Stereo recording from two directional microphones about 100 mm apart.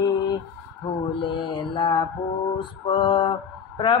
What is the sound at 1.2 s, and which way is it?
Mantra, 55° left (ahead or behind).